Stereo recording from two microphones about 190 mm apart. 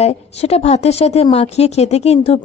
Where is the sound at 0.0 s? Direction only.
35° left (ahead or behind).